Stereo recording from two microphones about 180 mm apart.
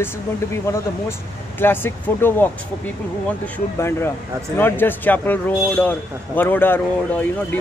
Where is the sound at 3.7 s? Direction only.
15° left (ahead or behind).